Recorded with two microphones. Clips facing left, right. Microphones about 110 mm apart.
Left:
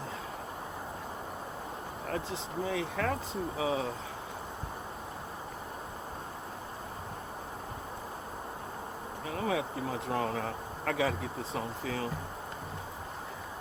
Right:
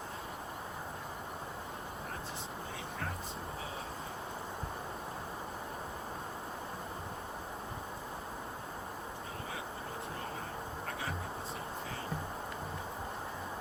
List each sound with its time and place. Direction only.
2.6 s speech: 90° left
9.3 s speech: 90° left